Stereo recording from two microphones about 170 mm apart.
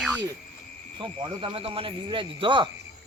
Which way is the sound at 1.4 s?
35° right (ahead or behind).